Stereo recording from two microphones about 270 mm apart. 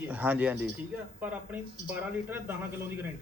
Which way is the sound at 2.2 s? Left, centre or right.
Centre.